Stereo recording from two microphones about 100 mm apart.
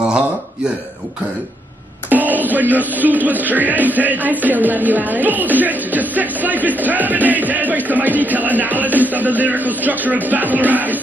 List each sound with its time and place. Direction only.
2.0 s speech: 15° right (ahead or behind)